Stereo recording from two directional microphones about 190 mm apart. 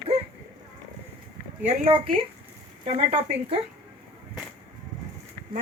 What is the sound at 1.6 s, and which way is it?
A woman's voice, 30° right (ahead or behind).